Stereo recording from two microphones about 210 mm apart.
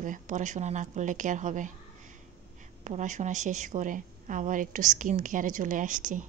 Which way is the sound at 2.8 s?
35° right (ahead or behind).